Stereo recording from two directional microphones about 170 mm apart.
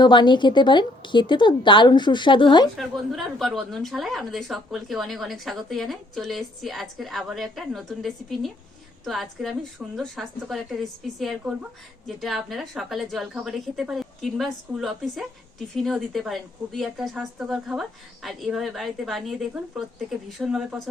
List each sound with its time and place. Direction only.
0.0 s a woman's voice: 25° left (ahead or behind)
2.7 s a woman's voice: centre (ahead or behind)